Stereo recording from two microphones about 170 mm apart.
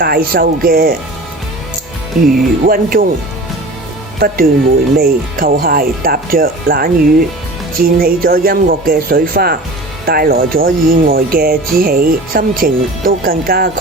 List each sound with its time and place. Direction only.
0.0 s speech: 60° right (ahead or behind)
2.2 s speech: 60° right (ahead or behind)
4.9 s speech: 60° right (ahead or behind)